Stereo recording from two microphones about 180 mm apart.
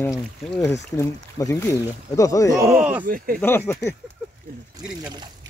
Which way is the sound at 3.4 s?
10° left (ahead or behind).